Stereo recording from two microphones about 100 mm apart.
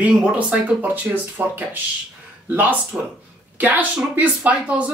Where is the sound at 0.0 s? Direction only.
10° right (ahead or behind).